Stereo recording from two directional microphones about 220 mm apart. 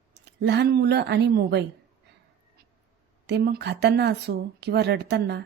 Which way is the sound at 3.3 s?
45° right (ahead or behind).